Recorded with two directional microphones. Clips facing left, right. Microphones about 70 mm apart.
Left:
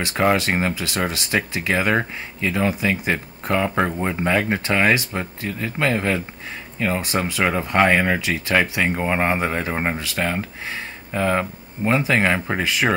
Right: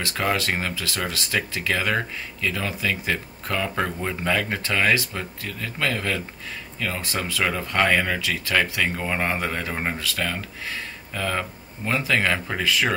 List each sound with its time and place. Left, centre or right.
0.0 s speech: left